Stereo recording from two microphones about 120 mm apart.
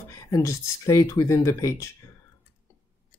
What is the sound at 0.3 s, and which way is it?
Speech, 25° left (ahead or behind).